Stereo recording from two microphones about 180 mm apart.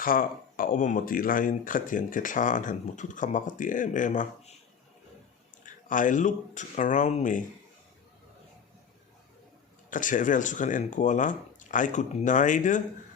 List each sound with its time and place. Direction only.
0.0 s speech: 50° left (ahead or behind)
5.6 s speech: 45° left (ahead or behind)
9.9 s speech: 45° left (ahead or behind)